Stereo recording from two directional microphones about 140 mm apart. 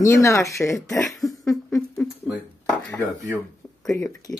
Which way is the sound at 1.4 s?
20° left (ahead or behind).